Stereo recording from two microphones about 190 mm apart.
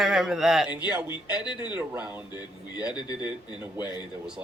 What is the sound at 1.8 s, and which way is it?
Speech, 10° right (ahead or behind).